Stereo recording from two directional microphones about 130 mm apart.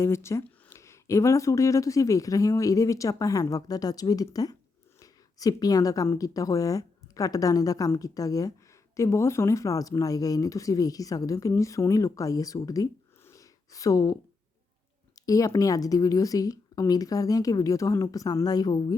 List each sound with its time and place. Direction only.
0.0 s speech: 20° left (ahead or behind)